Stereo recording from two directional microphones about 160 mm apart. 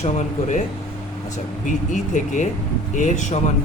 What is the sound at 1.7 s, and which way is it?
Speech, 50° left (ahead or behind).